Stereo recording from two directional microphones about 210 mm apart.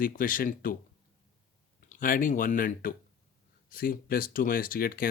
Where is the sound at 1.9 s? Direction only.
40° left (ahead or behind).